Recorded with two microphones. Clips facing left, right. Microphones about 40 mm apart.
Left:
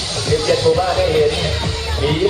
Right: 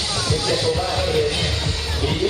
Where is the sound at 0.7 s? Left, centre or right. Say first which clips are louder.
Left 6 dB; centre.